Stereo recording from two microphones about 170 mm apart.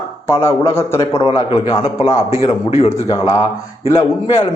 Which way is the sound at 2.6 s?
40° left (ahead or behind).